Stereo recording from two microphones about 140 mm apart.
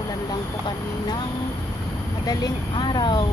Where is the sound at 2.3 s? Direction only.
30° left (ahead or behind).